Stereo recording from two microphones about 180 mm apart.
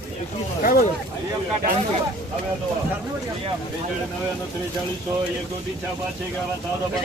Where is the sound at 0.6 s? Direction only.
55° left (ahead or behind).